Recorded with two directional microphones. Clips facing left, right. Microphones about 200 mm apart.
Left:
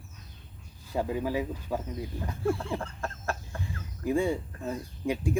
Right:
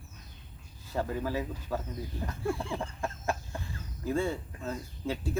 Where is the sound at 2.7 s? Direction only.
15° right (ahead or behind).